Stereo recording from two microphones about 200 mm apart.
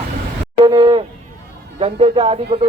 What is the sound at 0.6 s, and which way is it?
Speech, 25° right (ahead or behind).